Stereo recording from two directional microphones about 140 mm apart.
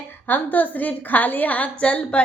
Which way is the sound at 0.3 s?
10° left (ahead or behind).